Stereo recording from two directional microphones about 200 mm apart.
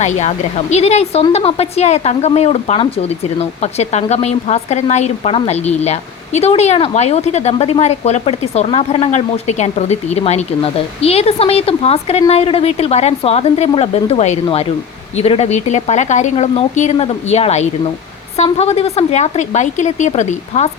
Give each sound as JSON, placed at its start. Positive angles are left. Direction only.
{"t": 0.0, "sound": "a woman's voice", "side_deg": 35}